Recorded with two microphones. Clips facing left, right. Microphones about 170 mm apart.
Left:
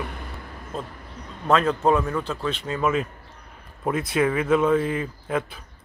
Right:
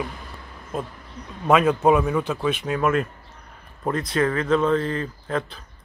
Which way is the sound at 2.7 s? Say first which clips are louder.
Right 1 dB; centre (ahead or behind).